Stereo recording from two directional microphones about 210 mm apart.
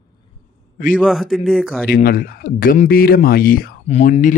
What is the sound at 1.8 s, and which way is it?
Speech, 40° left (ahead or behind).